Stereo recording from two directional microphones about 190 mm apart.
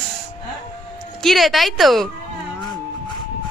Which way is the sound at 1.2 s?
Centre (ahead or behind).